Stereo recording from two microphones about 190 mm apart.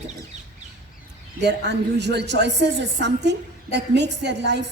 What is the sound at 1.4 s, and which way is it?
A woman's voice, 65° right (ahead or behind).